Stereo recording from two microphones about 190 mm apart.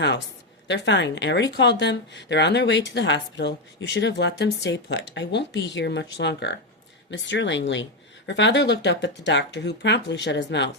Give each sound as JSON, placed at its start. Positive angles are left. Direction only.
{"t": 0.7, "sound": "a woman's voice", "side_deg": 65}